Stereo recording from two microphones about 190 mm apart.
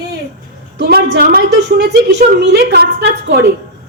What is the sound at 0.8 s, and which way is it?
A woman's voice, 55° right (ahead or behind).